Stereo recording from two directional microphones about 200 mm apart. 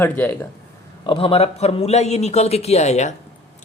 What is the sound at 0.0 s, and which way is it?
Speech, 10° left (ahead or behind).